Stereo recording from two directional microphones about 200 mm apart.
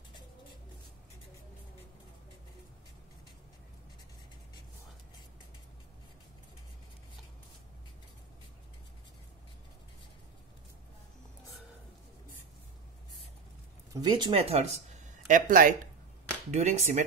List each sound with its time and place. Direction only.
14.0 s speech: 20° right (ahead or behind)